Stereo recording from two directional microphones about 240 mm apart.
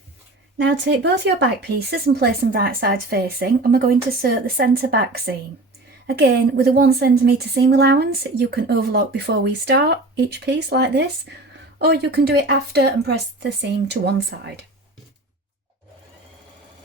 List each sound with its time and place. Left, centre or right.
0.6 s a woman's voice: right